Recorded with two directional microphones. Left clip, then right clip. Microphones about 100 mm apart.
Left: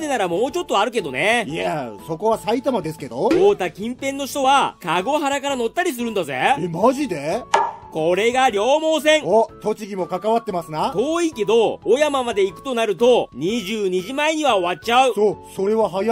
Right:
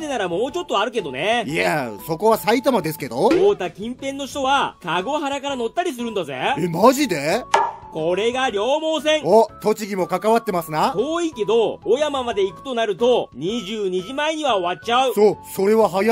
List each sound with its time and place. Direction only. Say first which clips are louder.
0.1 s speech: left 2 dB; 35° left (ahead or behind)
1.5 s speech: right 3 dB; 30° right (ahead or behind)
3.4 s speech: left 1 dB; 35° left (ahead or behind)
6.6 s speech: right 3 dB; 30° right (ahead or behind)
8.0 s speech: left 3 dB; 35° left (ahead or behind)
9.2 s speech: right 2 dB; 30° right (ahead or behind)
11.0 s speech: left 1 dB; 35° left (ahead or behind)
15.1 s speech: right 3 dB; 30° right (ahead or behind)